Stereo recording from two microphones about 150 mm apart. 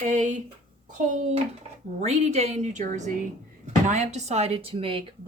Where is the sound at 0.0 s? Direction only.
55° right (ahead or behind).